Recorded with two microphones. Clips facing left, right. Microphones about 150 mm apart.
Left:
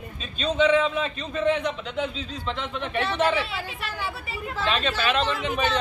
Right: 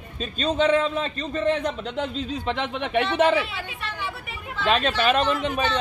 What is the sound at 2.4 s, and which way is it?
Speech, 55° right (ahead or behind).